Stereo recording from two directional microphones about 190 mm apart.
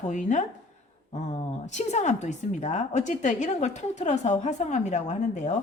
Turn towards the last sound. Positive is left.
turn(degrees=40)  # may be behind; listen again after turning